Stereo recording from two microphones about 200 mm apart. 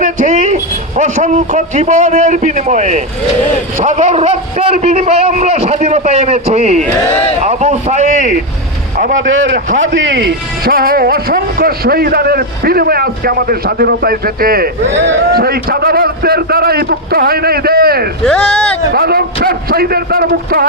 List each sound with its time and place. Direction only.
0.0 s a man's voice: 35° right (ahead or behind)
9.1 s a man's voice: 75° right (ahead or behind); by 18.1 s 50° right (ahead or behind)
18.3 s speech: 5° left (ahead or behind)
18.9 s a man's voice: 50° right (ahead or behind)